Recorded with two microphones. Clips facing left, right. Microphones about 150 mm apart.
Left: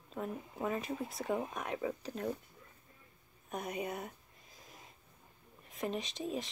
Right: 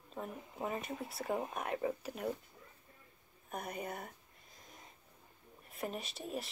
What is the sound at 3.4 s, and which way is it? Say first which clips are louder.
Speech: left 3 dB; centre (ahead or behind).